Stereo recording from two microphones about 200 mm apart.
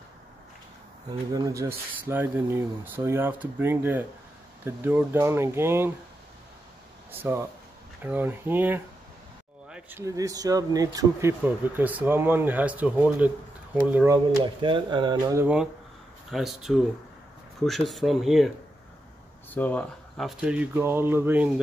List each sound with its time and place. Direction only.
1.3 s speech: 15° right (ahead or behind)
7.1 s speech: 10° right (ahead or behind)
14.1 s speech: 20° right (ahead or behind); by 18.5 s centre (ahead or behind)
19.5 s speech: 10° left (ahead or behind); by 21.5 s 10° right (ahead or behind)